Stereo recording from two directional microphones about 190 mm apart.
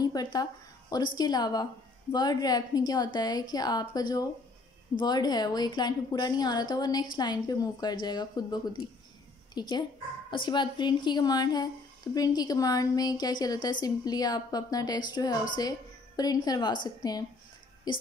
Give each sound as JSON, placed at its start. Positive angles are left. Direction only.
{"t": 0.0, "sound": "a woman's voice", "side_deg": 20}